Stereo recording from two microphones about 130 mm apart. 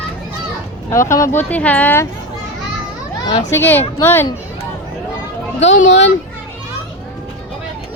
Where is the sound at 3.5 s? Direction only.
15° left (ahead or behind).